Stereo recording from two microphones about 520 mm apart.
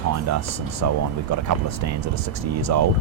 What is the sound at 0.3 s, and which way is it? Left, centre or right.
Speech, right.